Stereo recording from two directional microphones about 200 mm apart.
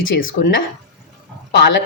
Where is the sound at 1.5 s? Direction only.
60° left (ahead or behind).